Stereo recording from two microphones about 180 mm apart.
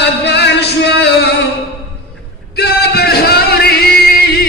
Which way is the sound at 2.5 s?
60° left (ahead or behind).